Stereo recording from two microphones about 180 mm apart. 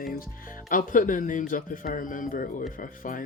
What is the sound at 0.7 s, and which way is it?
Speech, 50° left (ahead or behind).